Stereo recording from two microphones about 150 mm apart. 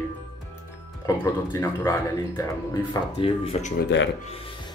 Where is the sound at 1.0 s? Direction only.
20° left (ahead or behind).